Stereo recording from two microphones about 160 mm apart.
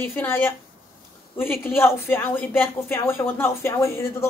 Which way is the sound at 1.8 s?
15° left (ahead or behind).